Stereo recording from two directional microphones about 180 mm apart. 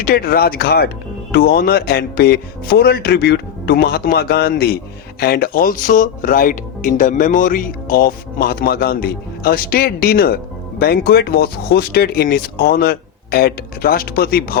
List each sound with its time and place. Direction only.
0.0 s speech: 55° left (ahead or behind)